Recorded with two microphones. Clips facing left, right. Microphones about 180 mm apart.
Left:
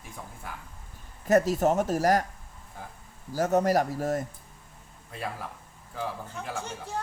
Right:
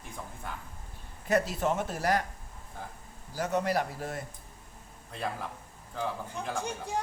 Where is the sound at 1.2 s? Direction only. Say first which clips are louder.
Left 6 dB; 40° left (ahead or behind).